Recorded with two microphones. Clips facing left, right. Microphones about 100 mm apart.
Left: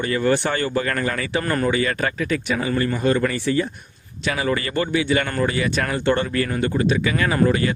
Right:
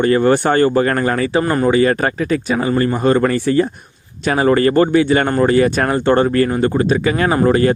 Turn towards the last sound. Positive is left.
turn(degrees=-45)  # may be behind; listen again after turning